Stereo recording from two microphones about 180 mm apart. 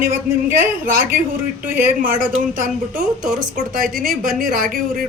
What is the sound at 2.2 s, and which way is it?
A woman's voice, 50° right (ahead or behind).